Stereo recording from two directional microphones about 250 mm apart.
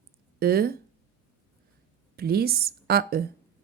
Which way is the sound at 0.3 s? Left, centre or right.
Right.